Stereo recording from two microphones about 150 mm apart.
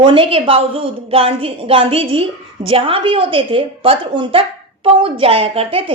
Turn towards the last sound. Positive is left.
turn(degrees=-40)  # may be behind; listen again after turning